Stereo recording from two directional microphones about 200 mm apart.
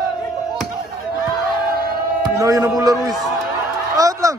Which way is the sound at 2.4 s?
15° right (ahead or behind).